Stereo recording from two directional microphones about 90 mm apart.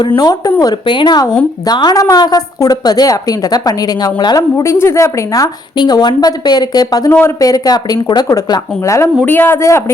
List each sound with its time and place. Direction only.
0.2 s a woman's voice: 45° left (ahead or behind)
0.6 s a woman's voice: 55° left (ahead or behind); by 5.5 s 35° left (ahead or behind)
5.7 s a woman's voice: 50° left (ahead or behind)
7.1 s a man's voice: 25° left (ahead or behind)
7.3 s a woman's voice: 40° left (ahead or behind)
8.8 s a woman's voice: 35° left (ahead or behind)
9.2 s a man's voice: 25° left (ahead or behind)